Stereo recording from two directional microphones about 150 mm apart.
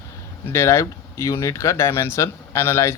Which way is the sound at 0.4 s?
15° left (ahead or behind).